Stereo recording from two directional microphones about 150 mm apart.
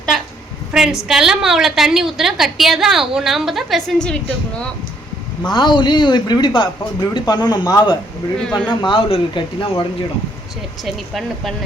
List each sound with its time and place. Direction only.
0.7 s a sound: 5° right (ahead or behind)
1.0 s a woman's voice: 5° right (ahead or behind)
5.5 s speech: 30° left (ahead or behind)
8.4 s a woman's voice: 5° left (ahead or behind)
8.8 s speech: 35° left (ahead or behind)
10.8 s a woman's voice: centre (ahead or behind)